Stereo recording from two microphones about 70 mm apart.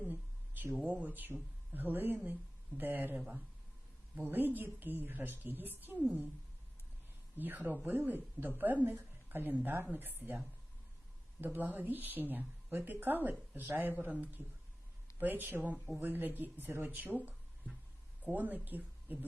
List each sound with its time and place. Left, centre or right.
0.0 s a sound: right
0.9 s speech: right
3.2 s speech: centre
4.2 s speech: right
7.3 s speech: right
11.3 s speech: right